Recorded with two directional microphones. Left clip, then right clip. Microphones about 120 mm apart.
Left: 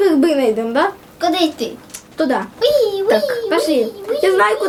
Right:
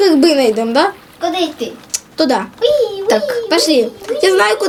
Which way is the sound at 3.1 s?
35° right (ahead or behind).